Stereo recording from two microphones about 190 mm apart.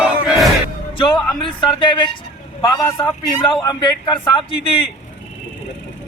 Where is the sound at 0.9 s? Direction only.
25° left (ahead or behind).